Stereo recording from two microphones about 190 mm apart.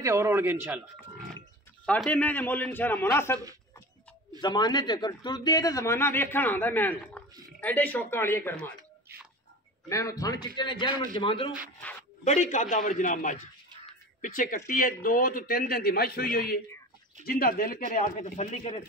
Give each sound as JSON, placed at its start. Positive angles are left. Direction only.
{"t": 0.0, "sound": "a man's voice", "side_deg": -15}
{"t": 1.9, "sound": "a man's voice", "side_deg": 5}
{"t": 4.4, "sound": "a man's voice", "side_deg": 20}
{"t": 9.8, "sound": "a man's voice", "side_deg": 15}
{"t": 12.3, "sound": "a man's voice", "side_deg": 40}
{"t": 18.4, "sound": "a man's voice", "side_deg": 35}